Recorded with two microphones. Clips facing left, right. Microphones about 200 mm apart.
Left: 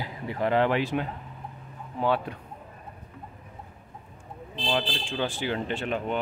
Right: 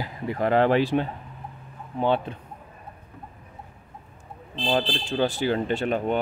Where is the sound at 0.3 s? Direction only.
45° right (ahead or behind); by 2.3 s 25° right (ahead or behind).